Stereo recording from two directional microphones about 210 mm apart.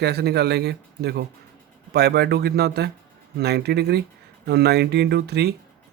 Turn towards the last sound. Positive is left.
turn(degrees=-50)  # may be behind; listen again after turning